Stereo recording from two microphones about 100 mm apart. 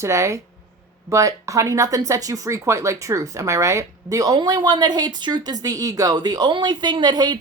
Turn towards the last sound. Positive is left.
turn(degrees=-45)  # may be behind; listen again after turning